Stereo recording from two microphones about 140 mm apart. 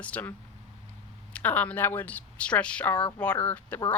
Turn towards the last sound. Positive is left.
turn(degrees=10)  # may be behind; listen again after turning